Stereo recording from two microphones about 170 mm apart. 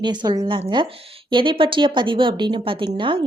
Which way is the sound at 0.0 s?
25° right (ahead or behind).